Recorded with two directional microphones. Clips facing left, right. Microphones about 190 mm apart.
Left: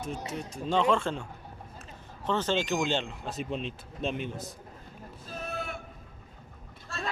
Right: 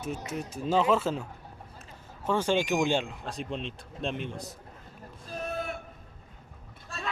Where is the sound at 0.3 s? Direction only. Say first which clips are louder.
Right 2 dB; 5° right (ahead or behind).